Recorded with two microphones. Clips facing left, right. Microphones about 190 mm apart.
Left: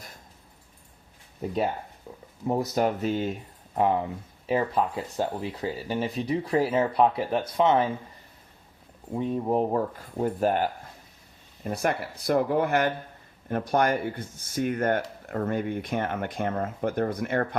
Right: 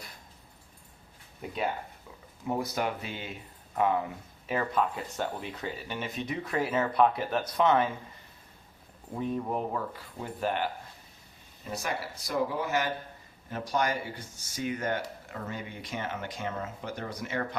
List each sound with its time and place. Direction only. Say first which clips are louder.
1.4 s speech: left 5 dB; 40° left (ahead or behind)
3.8 s speech: left 3 dB; 30° left (ahead or behind)
9.1 s speech: left 6 dB; 25° left (ahead or behind); by 10.7 s 45° left (ahead or behind)
11.6 s speech: left 7 dB; 55° left (ahead or behind)